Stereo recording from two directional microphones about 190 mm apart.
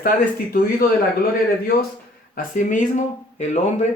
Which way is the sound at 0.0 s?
50° left (ahead or behind).